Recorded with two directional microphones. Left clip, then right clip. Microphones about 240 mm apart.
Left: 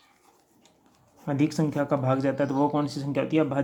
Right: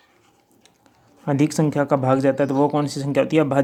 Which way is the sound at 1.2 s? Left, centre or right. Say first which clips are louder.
Right 6 dB; right.